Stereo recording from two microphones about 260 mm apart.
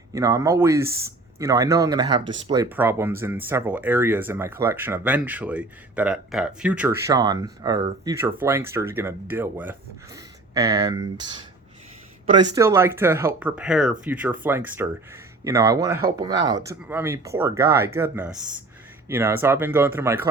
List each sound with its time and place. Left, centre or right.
0.1 s speech: centre
12.2 s speech: centre